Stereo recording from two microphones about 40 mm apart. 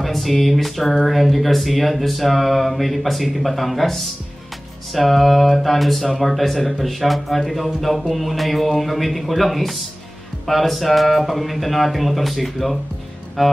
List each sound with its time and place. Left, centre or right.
0.0 s speech: centre